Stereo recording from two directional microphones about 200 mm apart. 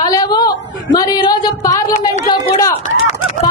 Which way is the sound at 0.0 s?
20° left (ahead or behind).